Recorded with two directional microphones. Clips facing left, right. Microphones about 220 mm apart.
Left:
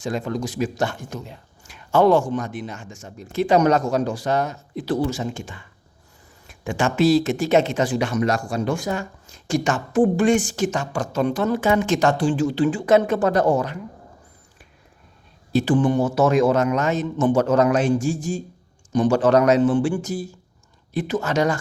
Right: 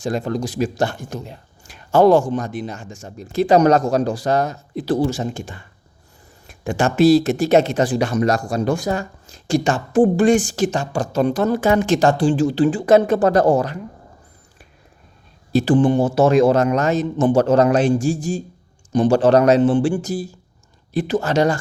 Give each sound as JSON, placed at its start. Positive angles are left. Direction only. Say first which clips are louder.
{"t": 0.0, "sound": "speech", "louder": "right 3 dB", "side_deg": -35}
{"t": 15.5, "sound": "speech", "louder": "right 3 dB", "side_deg": -35}